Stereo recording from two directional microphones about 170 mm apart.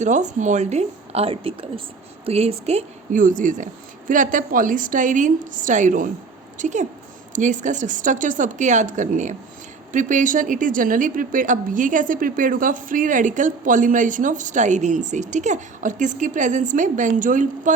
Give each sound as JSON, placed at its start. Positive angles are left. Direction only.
{"t": 0.0, "sound": "a woman's voice", "side_deg": -45}